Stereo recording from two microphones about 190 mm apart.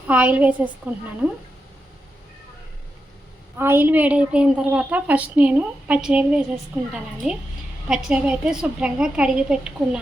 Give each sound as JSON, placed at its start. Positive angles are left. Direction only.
{"t": 0.1, "sound": "a woman's voice", "side_deg": -10}
{"t": 3.6, "sound": "a woman's voice", "side_deg": -10}
{"t": 7.9, "sound": "a woman's voice", "side_deg": -5}